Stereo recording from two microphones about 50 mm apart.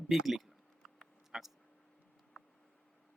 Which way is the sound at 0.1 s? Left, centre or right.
Centre.